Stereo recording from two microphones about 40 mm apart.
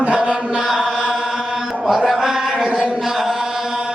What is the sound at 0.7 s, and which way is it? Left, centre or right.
Chant, centre.